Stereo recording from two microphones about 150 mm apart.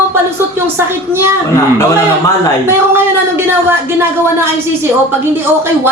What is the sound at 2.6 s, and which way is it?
Speech, 15° right (ahead or behind).